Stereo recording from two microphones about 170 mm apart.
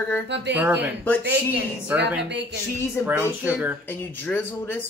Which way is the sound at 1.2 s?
85° right.